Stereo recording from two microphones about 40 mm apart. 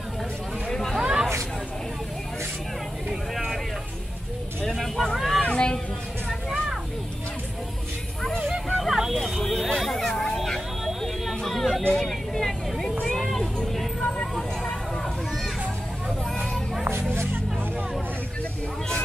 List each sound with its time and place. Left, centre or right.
0.7 s hubbub: centre
0.9 s hubbub: centre
4.6 s vehicle: centre
8.6 s a sound: centre
9.1 s vehicle: centre
11.4 s chatter: centre
11.9 s vehicle: centre
14.0 s vehicle: left